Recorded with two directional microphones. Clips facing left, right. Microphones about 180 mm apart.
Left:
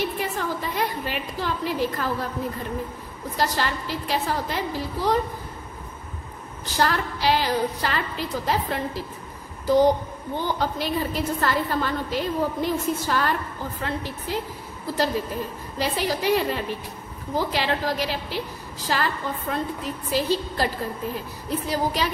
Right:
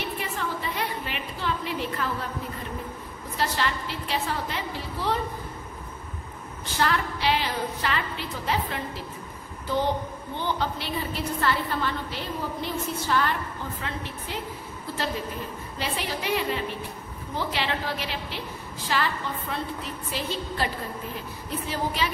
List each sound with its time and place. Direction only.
0.0 s a sound: 40° left (ahead or behind)
3.3 s a woman's voice: 40° left (ahead or behind)
6.6 s a woman's voice: 40° left (ahead or behind)
15.8 s a woman's voice: 40° left (ahead or behind)